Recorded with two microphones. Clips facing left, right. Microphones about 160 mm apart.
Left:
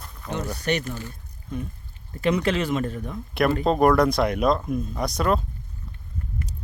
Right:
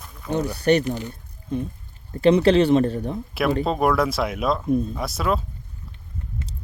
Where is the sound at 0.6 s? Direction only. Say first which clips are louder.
Right 8 dB; 35° right (ahead or behind).